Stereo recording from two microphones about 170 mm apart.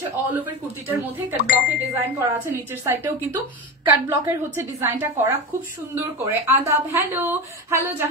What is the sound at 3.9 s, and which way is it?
A woman's voice, 15° right (ahead or behind).